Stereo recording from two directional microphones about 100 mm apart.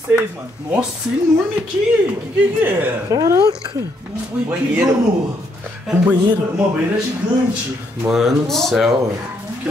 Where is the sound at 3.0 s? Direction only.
35° right (ahead or behind).